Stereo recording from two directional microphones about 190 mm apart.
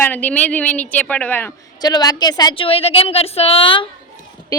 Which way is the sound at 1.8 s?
20° left (ahead or behind).